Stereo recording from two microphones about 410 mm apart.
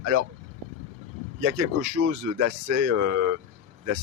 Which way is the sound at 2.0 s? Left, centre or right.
Right.